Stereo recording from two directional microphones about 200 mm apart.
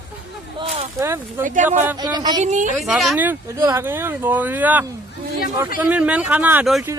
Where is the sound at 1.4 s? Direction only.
40° right (ahead or behind).